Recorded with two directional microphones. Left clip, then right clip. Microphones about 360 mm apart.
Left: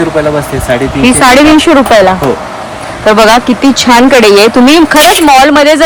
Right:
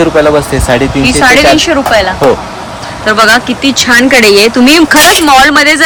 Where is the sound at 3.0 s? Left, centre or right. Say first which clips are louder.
Left 2 dB; centre.